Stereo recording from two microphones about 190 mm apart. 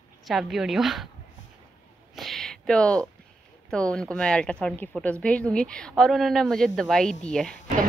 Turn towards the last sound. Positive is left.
turn(degrees=5)  # may be behind; listen again after turning